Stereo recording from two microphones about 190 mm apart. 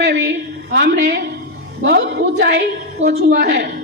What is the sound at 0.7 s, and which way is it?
A woman's voice, 60° right (ahead or behind).